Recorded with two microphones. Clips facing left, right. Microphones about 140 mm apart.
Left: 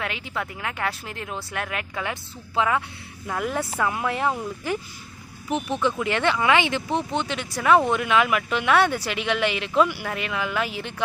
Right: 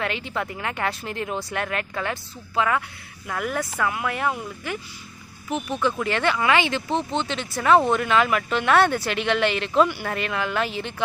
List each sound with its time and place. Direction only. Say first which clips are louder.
0.0 s speech: right 3 dB; 5° left (ahead or behind); by 4.8 s 30° left (ahead or behind)
5.8 s speech: right 1 dB; 20° left (ahead or behind)
7.5 s speech: right 1 dB; centre (ahead or behind)